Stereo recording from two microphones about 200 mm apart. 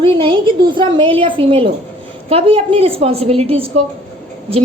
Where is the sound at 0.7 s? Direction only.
25° right (ahead or behind).